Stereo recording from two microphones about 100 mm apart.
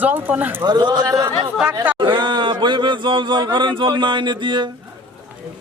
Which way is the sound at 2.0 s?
50° right (ahead or behind).